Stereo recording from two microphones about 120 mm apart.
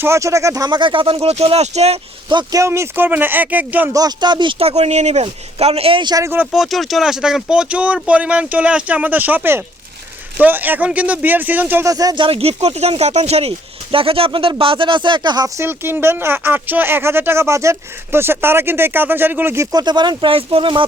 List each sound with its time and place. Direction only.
0.0 s speech: 25° right (ahead or behind)
0.8 s speech: 45° right (ahead or behind); by 2.0 s 65° right (ahead or behind)
2.3 s speech: 35° right (ahead or behind); by 3.9 s 15° right (ahead or behind)
3.9 s speech: 35° right (ahead or behind)
4.6 s speech: 65° right (ahead or behind); by 6.2 s 40° right (ahead or behind)
6.2 s speech: 15° right (ahead or behind)
6.5 s speech: centre (ahead or behind)
11.9 s speech: 30° right (ahead or behind)
12.2 s speech: 55° right (ahead or behind); by 19.6 s 15° right (ahead or behind)
19.7 s speech: 35° right (ahead or behind)